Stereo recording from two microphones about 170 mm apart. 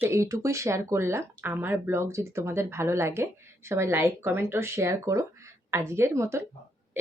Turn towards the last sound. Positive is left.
turn(degrees=-15)  # may be behind; listen again after turning